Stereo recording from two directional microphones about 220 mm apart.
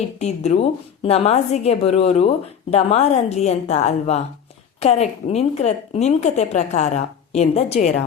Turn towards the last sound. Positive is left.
turn(degrees=30)  # may be behind; listen again after turning